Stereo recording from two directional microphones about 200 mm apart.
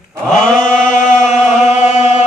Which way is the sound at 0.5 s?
35° left (ahead or behind).